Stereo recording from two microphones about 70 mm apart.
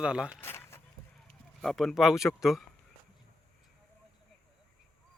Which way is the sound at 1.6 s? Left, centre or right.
Centre.